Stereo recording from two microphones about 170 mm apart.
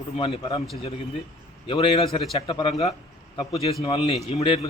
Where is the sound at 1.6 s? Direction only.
30° left (ahead or behind).